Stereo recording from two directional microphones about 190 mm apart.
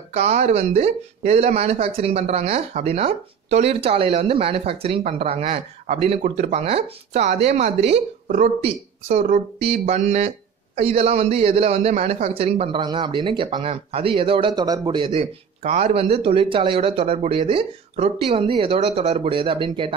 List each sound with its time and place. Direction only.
0.1 s a man's voice: 35° right (ahead or behind)